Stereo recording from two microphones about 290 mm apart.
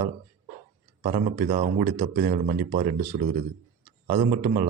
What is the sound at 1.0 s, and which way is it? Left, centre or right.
Speech, right.